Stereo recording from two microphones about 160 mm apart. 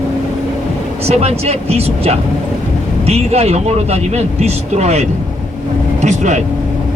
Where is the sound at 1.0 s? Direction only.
40° right (ahead or behind).